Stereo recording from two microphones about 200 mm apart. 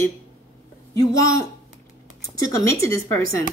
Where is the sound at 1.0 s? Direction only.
15° left (ahead or behind).